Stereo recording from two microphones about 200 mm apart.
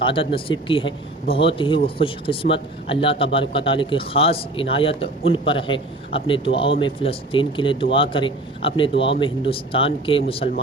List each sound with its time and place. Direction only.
0.0 s speech: 25° left (ahead or behind)